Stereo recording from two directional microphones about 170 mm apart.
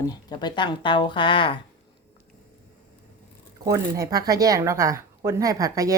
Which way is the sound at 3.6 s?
20° right (ahead or behind).